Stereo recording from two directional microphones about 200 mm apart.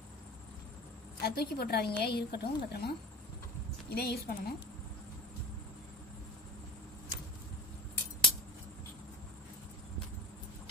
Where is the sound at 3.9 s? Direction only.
55° left (ahead or behind).